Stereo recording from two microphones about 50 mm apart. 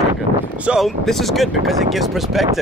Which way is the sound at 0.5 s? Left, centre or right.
Right.